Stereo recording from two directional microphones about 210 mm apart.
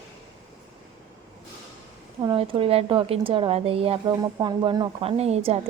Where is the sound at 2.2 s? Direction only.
25° right (ahead or behind).